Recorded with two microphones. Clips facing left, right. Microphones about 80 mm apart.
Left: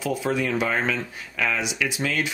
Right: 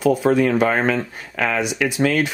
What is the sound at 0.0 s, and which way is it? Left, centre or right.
Speech, right.